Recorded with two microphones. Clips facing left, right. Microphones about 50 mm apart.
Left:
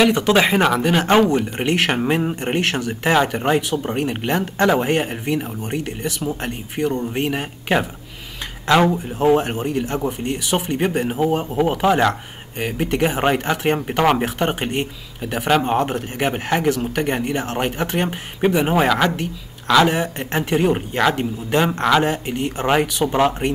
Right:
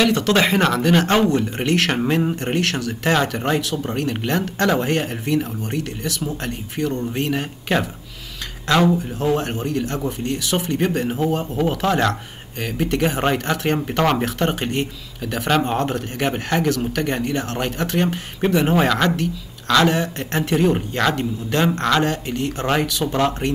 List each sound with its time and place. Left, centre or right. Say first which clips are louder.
0.0 s speech: left 2 dB; centre
8.9 s speech: left 4 dB; left